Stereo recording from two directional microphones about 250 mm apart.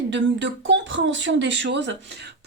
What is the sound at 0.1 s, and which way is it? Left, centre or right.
Speech, right.